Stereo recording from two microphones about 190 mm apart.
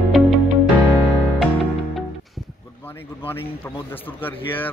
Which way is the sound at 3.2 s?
10° left (ahead or behind).